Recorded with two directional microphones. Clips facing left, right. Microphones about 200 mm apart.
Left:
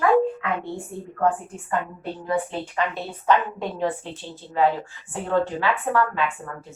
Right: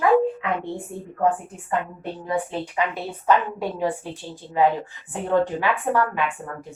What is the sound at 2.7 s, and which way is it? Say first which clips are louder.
A woman's voice: right 1 dB; 10° right (ahead or behind).